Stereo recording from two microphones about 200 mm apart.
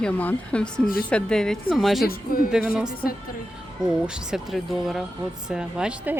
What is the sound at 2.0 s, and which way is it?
Speech, 45° left (ahead or behind).